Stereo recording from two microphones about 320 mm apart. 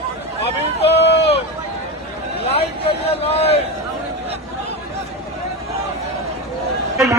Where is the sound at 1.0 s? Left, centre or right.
Left.